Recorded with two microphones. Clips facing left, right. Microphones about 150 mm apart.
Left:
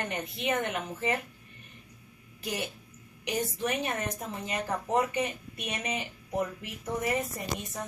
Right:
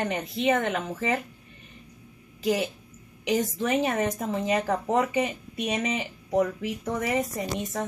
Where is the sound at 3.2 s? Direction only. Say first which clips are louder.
Right 5 dB; 90° right.